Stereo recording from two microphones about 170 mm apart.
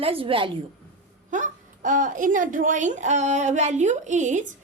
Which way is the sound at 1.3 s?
50° right (ahead or behind).